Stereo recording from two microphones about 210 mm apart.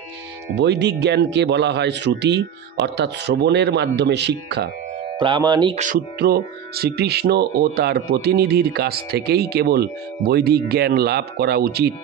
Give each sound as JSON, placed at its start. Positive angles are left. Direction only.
{"t": 0.6, "sound": "speech", "side_deg": -55}
{"t": 5.2, "sound": "speech", "side_deg": -20}
{"t": 5.8, "sound": "speech", "side_deg": -45}